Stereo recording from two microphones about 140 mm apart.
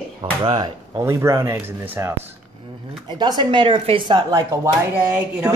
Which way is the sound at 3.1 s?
30° right (ahead or behind).